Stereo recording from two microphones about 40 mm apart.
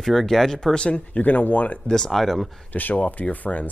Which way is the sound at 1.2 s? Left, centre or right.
Left.